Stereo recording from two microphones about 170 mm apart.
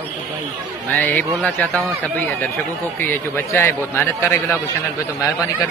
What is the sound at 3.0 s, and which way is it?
Speech, 15° left (ahead or behind).